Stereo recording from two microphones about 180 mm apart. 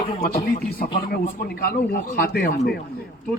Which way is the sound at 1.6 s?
55° left (ahead or behind).